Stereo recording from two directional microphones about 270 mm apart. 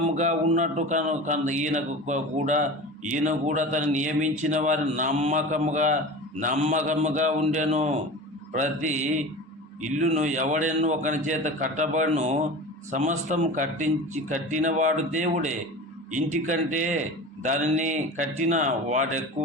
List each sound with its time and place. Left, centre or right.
0.0 s speech: right